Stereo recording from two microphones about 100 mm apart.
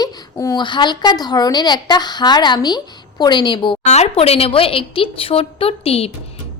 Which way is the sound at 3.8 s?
90° left.